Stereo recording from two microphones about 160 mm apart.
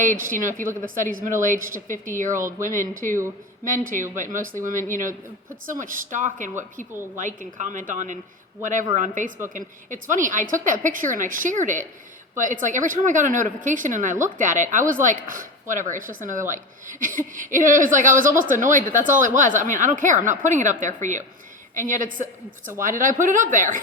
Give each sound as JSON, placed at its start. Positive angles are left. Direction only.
{"t": 0.0, "sound": "a woman's voice", "side_deg": -55}